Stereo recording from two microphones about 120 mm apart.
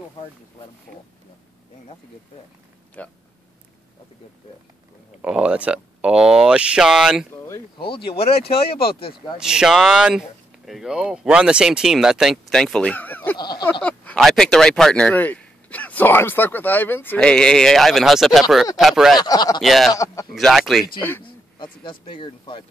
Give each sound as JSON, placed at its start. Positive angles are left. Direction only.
{"t": 3.0, "sound": "speech", "side_deg": 10}
{"t": 5.2, "sound": "speech", "side_deg": -10}
{"t": 7.8, "sound": "speech", "side_deg": 45}
{"t": 9.4, "sound": "speech", "side_deg": -5}
{"t": 13.4, "sound": "a sound", "side_deg": 35}
{"t": 13.8, "sound": "a sound", "side_deg": 10}
{"t": 14.2, "sound": "speech", "side_deg": 0}
{"t": 19.1, "sound": "a sound", "side_deg": 35}
{"t": 19.6, "sound": "speech", "side_deg": 0}
{"t": 19.9, "sound": "speech", "side_deg": 25}
{"t": 20.3, "sound": "speech", "side_deg": 0}
{"t": 21.8, "sound": "speech", "side_deg": 45}